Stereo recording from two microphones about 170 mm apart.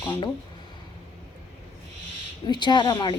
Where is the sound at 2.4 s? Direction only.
25° left (ahead or behind).